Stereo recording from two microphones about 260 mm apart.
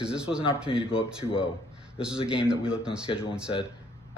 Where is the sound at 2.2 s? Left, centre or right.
Left.